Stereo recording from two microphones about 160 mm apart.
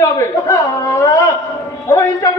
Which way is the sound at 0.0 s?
20° left (ahead or behind).